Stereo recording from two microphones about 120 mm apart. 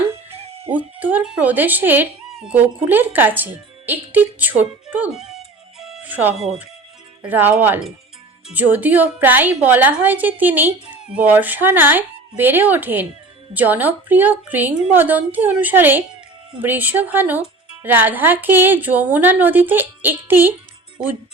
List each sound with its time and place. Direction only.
0.3 s music: 55° right (ahead or behind)
0.9 s a woman's voice: 15° right (ahead or behind)
5.1 s speech: 5° right (ahead or behind)
5.8 s music: 5° right (ahead or behind)
6.1 s a woman's voice: 15° right (ahead or behind)